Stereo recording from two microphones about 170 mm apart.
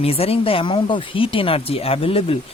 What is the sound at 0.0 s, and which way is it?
Speech, 35° left (ahead or behind).